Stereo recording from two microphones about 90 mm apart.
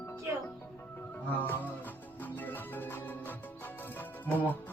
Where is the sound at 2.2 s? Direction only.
20° left (ahead or behind).